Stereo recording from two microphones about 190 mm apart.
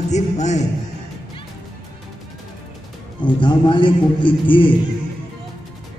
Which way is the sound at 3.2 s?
25° left (ahead or behind).